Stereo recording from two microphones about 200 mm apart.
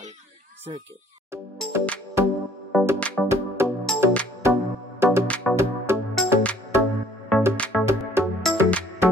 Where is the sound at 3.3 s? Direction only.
10° right (ahead or behind).